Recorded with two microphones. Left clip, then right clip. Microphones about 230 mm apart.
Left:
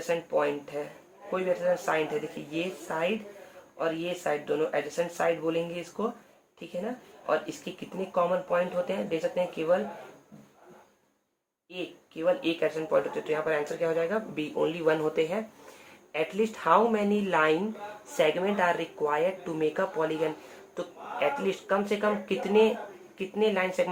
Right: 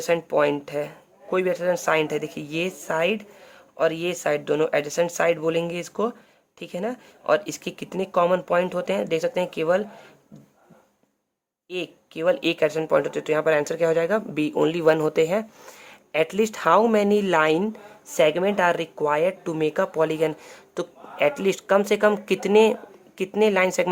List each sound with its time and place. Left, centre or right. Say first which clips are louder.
0.1 s speech: right 7 dB; right
11.7 s speech: right 7 dB; right